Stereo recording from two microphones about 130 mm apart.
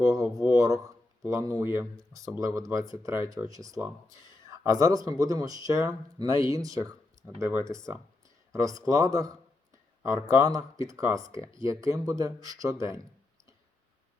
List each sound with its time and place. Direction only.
0.0 s speech: 25° right (ahead or behind)